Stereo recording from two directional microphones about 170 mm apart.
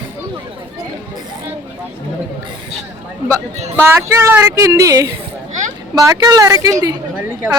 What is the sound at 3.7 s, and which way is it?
A woman's voice, 15° right (ahead or behind).